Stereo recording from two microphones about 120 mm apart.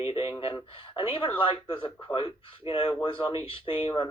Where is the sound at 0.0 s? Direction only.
45° left (ahead or behind).